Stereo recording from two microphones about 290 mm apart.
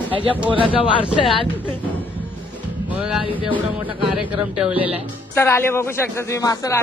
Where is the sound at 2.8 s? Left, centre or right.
Centre.